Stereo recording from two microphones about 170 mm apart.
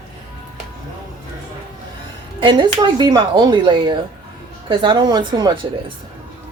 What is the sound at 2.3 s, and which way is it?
Speech, 30° right (ahead or behind).